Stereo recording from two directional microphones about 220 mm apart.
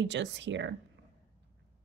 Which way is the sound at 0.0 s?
55° right (ahead or behind).